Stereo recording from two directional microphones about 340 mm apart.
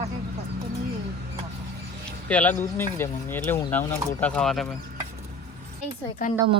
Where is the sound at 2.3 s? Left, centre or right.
Centre.